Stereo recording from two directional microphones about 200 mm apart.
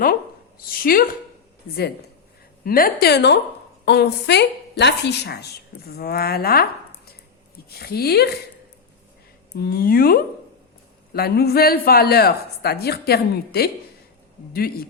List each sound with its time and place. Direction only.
0.7 s a woman's voice: 45° left (ahead or behind)
2.6 s a woman's voice: 45° left (ahead or behind)
9.6 s a woman's voice: 50° left (ahead or behind)